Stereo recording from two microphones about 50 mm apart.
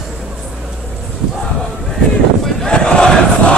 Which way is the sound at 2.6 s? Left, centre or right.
Centre.